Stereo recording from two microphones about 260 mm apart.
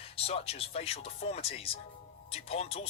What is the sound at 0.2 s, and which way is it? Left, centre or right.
Speech, left.